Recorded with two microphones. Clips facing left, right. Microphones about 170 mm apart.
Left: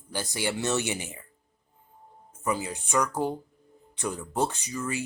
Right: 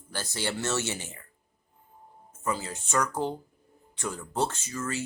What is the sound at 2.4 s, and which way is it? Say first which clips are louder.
Speech: left 2 dB; 15° left (ahead or behind).